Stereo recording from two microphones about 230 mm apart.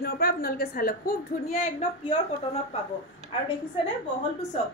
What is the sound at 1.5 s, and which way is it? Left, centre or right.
Speech, left.